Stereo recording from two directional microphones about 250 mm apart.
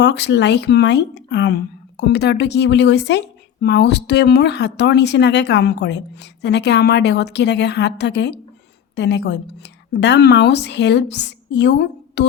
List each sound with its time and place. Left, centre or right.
0.0 s speech: left